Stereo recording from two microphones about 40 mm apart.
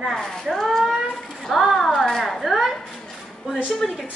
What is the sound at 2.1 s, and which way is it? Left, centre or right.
Speech, centre.